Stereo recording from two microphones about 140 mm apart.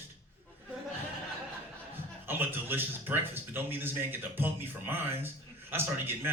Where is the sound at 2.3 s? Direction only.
15° right (ahead or behind).